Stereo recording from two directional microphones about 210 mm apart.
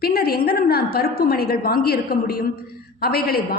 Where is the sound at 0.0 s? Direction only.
45° left (ahead or behind).